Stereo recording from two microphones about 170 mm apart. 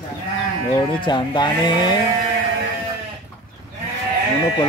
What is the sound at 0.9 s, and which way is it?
Speech, 30° left (ahead or behind).